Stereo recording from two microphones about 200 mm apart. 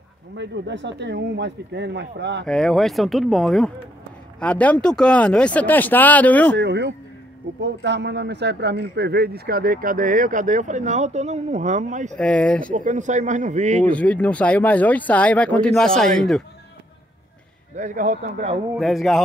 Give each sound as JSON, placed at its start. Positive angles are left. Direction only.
{"t": 0.4, "sound": "speech", "side_deg": -60}
{"t": 2.4, "sound": "speech", "side_deg": 5}
{"t": 6.5, "sound": "speech", "side_deg": -60}
{"t": 12.2, "sound": "speech", "side_deg": 5}
{"t": 12.7, "sound": "a man's voice", "side_deg": -40}
{"t": 13.8, "sound": "speech", "side_deg": 5}
{"t": 17.7, "sound": "a man's voice", "side_deg": -40}
{"t": 18.8, "sound": "speech", "side_deg": 0}